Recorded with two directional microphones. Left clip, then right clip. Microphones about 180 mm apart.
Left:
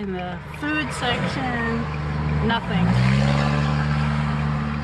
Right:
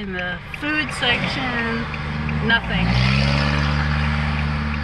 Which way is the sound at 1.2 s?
50° left (ahead or behind).